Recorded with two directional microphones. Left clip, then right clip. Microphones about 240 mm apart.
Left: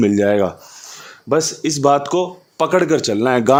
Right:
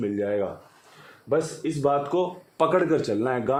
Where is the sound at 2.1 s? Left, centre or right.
Left.